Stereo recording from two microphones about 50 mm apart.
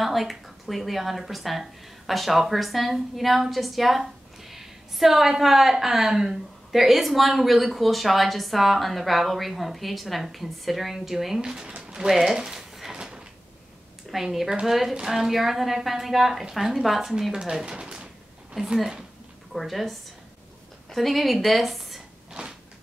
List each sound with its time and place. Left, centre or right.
0.0 s speech: centre
12.9 s a sound: centre
14.1 s speech: centre
18.5 s a woman's voice: centre
19.5 s a woman's voice: centre